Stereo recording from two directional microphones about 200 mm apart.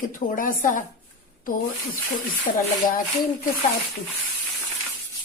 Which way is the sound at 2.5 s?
45° left (ahead or behind).